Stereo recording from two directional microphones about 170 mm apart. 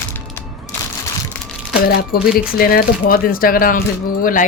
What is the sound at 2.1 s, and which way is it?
Speech, 60° left (ahead or behind).